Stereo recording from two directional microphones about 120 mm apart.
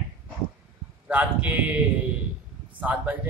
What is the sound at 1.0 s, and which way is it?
Speech, 10° right (ahead or behind).